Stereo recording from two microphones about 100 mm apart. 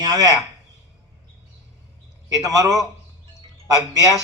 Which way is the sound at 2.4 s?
35° right (ahead or behind).